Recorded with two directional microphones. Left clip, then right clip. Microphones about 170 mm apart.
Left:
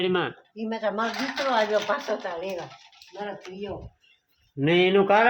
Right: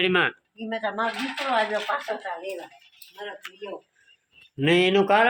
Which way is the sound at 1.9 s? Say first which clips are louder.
Even; 45° left (ahead or behind).